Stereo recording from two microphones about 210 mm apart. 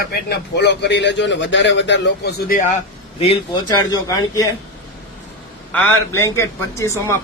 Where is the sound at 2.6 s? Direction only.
30° left (ahead or behind).